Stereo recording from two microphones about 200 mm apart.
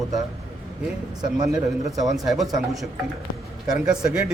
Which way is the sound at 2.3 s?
Centre (ahead or behind).